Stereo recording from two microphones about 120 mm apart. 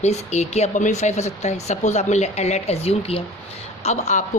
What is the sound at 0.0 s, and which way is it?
Speech, 70° left (ahead or behind).